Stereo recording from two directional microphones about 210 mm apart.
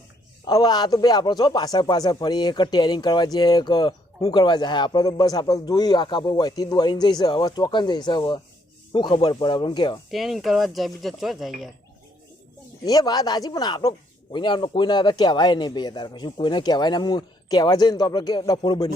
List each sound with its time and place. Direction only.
0.4 s speech: 20° left (ahead or behind)
10.1 s speech: centre (ahead or behind)
12.8 s speech: 15° left (ahead or behind)